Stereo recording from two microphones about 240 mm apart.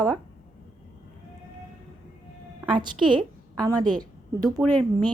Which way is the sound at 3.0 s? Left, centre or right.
Centre.